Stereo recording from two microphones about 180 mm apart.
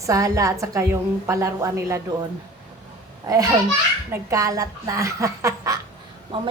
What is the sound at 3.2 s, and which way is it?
A woman's voice, 20° right (ahead or behind).